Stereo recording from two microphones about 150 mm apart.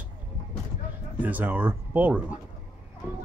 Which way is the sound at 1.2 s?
10° right (ahead or behind).